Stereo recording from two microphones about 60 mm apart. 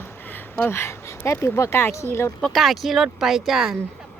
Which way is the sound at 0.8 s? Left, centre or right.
Left.